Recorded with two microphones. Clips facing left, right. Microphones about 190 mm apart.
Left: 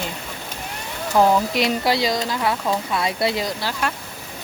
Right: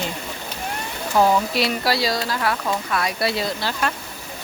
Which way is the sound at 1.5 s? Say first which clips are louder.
Left 1 dB; 20° left (ahead or behind).